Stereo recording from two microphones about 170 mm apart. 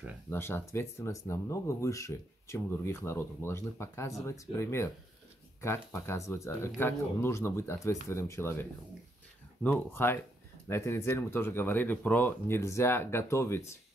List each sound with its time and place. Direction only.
0.3 s speech: 15° left (ahead or behind)